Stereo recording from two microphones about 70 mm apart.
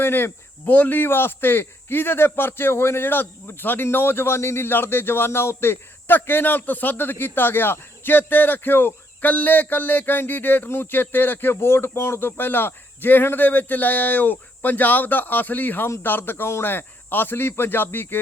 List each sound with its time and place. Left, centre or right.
0.0 s speech: left